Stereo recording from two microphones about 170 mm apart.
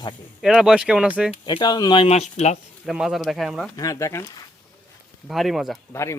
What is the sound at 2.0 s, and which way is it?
Speech, 40° left (ahead or behind).